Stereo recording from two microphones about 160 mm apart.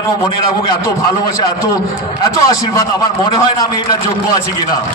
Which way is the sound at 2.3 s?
20° left (ahead or behind).